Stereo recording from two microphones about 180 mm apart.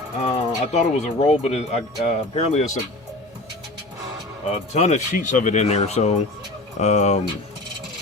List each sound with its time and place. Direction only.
0.2 s speech: 40° left (ahead or behind)
4.4 s speech: 35° left (ahead or behind)